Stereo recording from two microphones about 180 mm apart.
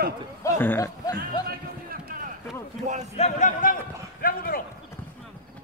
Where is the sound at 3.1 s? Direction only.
40° left (ahead or behind).